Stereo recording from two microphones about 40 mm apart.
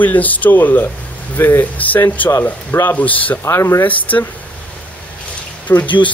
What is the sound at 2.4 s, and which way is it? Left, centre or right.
Speech, left.